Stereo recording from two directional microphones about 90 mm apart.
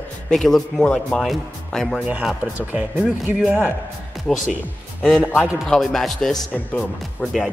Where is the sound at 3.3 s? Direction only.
10° right (ahead or behind).